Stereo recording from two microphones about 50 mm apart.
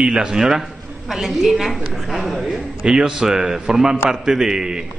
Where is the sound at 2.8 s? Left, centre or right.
Centre.